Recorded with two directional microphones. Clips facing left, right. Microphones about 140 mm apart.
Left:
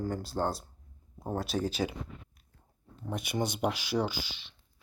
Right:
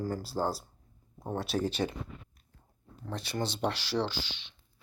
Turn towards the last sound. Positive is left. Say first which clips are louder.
# left 1 dB
turn(degrees=5)  # may be behind; listen again after turning